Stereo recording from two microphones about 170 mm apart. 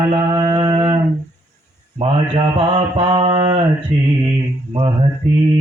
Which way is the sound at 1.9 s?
30° right (ahead or behind).